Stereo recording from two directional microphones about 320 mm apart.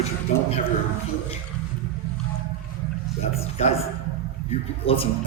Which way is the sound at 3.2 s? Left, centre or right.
Centre.